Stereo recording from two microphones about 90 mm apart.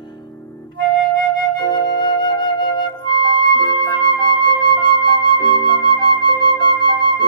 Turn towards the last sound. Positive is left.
turn(degrees=55)  # may be behind; listen again after turning